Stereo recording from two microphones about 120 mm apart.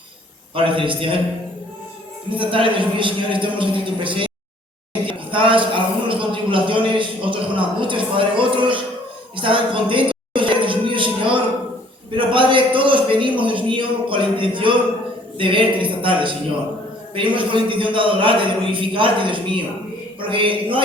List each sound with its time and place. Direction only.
0.5 s speech: 45° right (ahead or behind)
2.3 s speech: 45° right (ahead or behind)
9.3 s music: 45° right (ahead or behind)
12.1 s a sound: 45° right (ahead or behind)
15.4 s speech: 45° right (ahead or behind)